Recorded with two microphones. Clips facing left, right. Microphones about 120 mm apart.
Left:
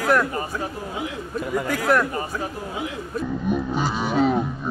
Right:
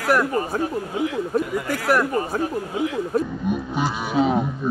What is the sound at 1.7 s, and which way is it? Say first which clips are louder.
Speech: right 1 dB; 5° right (ahead or behind).